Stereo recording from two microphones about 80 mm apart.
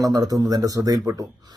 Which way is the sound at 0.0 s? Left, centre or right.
Right.